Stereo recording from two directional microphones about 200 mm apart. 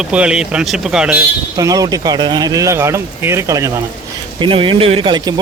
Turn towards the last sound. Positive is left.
turn(degrees=-20)  # may be behind; listen again after turning